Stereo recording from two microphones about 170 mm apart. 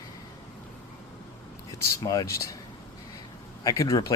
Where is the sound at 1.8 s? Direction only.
20° left (ahead or behind).